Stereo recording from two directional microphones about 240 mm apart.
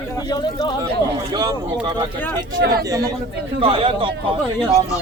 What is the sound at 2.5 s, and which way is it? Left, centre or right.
Speech, right.